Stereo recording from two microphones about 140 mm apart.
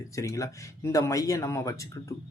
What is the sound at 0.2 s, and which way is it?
Speech, 25° left (ahead or behind).